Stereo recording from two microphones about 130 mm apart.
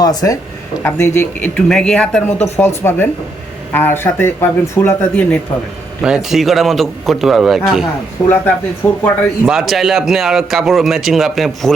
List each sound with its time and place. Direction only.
0.0 s a man's voice: 30° left (ahead or behind); by 2.2 s 5° left (ahead or behind)
2.4 s speech: 15° left (ahead or behind)
6.0 s a man's voice: 5° right (ahead or behind)
8.2 s speech: 10° left (ahead or behind)
9.5 s a man's voice: centre (ahead or behind)